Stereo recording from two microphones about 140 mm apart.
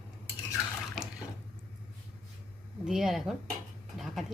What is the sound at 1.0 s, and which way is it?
Water, centre (ahead or behind).